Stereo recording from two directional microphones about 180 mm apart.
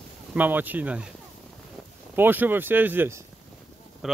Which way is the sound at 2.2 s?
10° right (ahead or behind).